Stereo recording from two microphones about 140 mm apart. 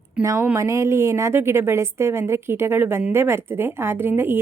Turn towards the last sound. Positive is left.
turn(degrees=-15)  # may be behind; listen again after turning